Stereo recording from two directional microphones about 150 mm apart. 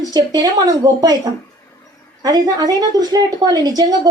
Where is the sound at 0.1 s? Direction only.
25° right (ahead or behind).